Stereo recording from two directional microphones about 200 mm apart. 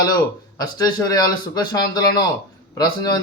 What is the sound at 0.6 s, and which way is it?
A man's voice, 20° left (ahead or behind).